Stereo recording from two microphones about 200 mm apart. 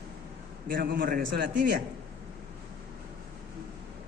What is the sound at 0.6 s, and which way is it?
Speech, 45° right (ahead or behind).